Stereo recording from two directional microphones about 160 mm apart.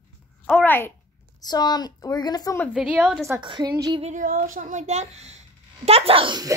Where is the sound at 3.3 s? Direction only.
30° right (ahead or behind).